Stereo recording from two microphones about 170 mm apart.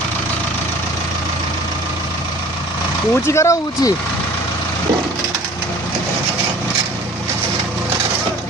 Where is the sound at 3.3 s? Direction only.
15° left (ahead or behind).